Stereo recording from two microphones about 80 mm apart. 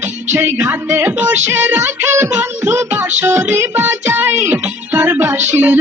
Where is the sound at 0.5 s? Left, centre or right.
Right.